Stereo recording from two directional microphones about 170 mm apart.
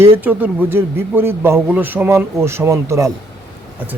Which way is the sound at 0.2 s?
10° right (ahead or behind).